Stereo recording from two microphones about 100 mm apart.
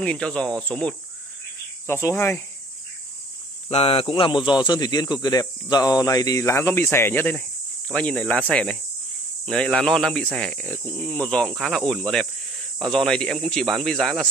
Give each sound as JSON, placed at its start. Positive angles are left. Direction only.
{"t": 0.0, "sound": "speech", "side_deg": 10}
{"t": 1.9, "sound": "speech", "side_deg": 30}
{"t": 3.7, "sound": "speech", "side_deg": 70}